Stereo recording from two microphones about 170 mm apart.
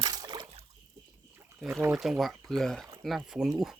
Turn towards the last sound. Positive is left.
turn(degrees=-5)  # may be behind; listen again after turning